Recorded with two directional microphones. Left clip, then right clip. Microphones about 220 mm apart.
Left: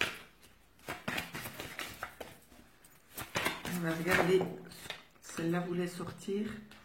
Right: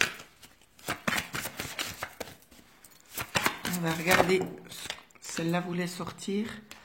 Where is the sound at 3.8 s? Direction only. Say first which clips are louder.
Right 6 dB; 30° right (ahead or behind).